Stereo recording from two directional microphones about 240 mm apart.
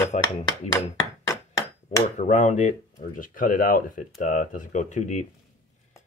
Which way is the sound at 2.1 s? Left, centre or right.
Left.